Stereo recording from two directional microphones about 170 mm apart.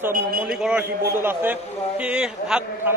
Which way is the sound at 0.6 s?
10° right (ahead or behind).